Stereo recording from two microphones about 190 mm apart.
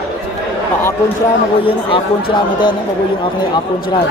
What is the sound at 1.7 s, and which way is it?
Speech, 25° left (ahead or behind).